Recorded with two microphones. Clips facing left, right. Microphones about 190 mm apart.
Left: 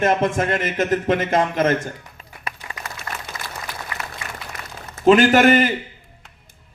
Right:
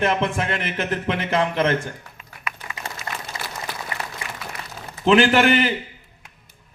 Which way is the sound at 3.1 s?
30° right (ahead or behind).